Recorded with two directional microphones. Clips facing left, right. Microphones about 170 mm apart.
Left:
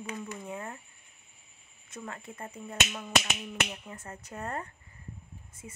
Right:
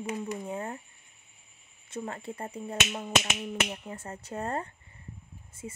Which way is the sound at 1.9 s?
30° right (ahead or behind).